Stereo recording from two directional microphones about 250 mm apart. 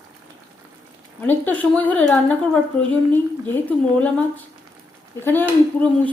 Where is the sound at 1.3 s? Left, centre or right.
Centre.